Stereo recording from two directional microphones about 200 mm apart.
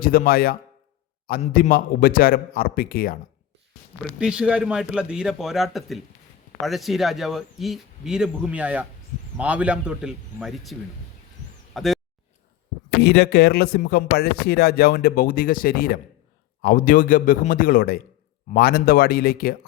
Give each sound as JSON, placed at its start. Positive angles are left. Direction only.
{"t": 0.0, "sound": "speech", "side_deg": 45}
{"t": 4.2, "sound": "speech", "side_deg": -5}
{"t": 11.7, "sound": "a sound", "side_deg": 0}
{"t": 13.0, "sound": "speech", "side_deg": 55}